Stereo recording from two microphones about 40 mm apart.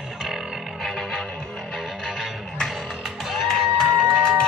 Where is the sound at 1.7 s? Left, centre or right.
Centre.